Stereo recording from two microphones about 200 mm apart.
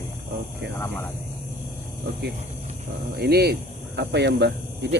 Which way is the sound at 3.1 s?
50° right (ahead or behind).